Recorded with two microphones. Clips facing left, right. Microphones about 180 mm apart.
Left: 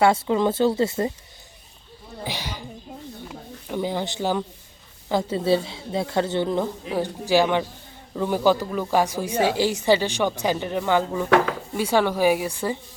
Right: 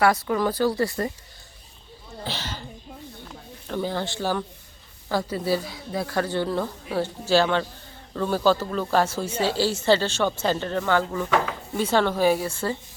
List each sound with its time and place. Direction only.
0.0 s a woman's voice: 25° left (ahead or behind)
2.2 s speech: 15° left (ahead or behind)
3.2 s a sound: 15° left (ahead or behind)
5.0 s a woman's voice: 20° left (ahead or behind)